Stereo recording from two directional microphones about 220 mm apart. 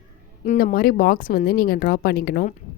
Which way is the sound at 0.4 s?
40° left (ahead or behind).